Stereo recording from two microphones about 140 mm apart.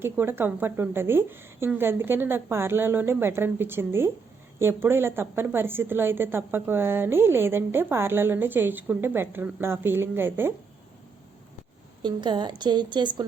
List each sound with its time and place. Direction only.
0.0 s a woman's voice: 15° right (ahead or behind)
12.0 s a woman's voice: 30° right (ahead or behind)